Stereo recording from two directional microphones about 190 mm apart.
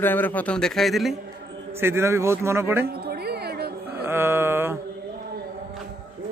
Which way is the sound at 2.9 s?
55° right (ahead or behind).